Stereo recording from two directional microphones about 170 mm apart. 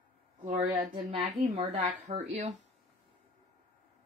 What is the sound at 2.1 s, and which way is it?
Speech, 45° right (ahead or behind).